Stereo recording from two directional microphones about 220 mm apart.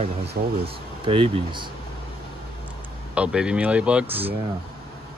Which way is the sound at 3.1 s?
5° right (ahead or behind).